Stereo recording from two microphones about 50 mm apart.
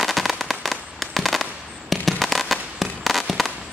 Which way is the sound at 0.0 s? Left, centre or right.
Centre.